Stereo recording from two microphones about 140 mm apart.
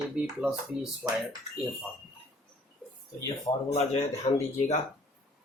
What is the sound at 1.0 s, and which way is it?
Speech, 10° right (ahead or behind).